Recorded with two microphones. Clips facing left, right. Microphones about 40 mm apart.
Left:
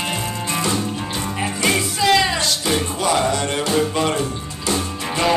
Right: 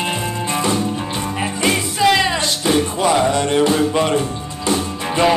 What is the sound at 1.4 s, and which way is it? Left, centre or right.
Music, centre.